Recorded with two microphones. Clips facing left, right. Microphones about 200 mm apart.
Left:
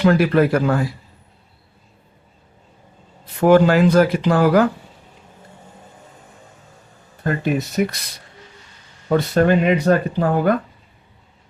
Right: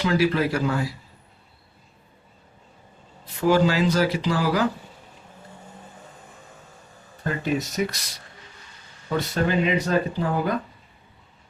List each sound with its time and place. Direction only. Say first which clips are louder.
0.0 s speech: left 6 dB; 55° left (ahead or behind)
3.4 s speech: left 7 dB; 55° left (ahead or behind)
7.3 s speech: left 5 dB; 60° left (ahead or behind)